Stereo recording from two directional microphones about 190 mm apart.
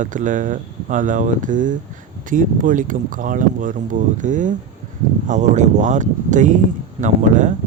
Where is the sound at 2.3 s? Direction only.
45° right (ahead or behind).